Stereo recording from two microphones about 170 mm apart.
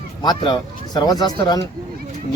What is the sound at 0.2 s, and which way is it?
Speech, 25° left (ahead or behind).